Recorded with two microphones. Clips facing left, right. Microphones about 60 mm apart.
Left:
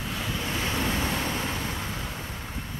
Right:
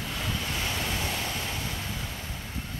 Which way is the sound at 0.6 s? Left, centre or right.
Left.